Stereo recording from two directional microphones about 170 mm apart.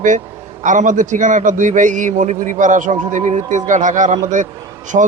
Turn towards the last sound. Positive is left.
turn(degrees=-45)  # may be behind; listen again after turning